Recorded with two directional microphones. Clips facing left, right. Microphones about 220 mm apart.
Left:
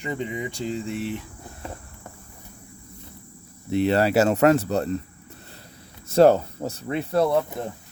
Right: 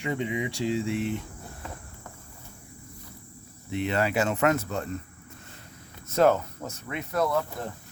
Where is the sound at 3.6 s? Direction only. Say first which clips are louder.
Left 7 dB; 35° left (ahead or behind).